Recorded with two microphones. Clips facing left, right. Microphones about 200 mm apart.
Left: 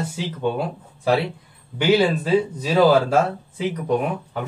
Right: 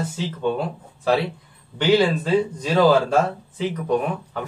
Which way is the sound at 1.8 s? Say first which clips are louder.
Even; 10° left (ahead or behind).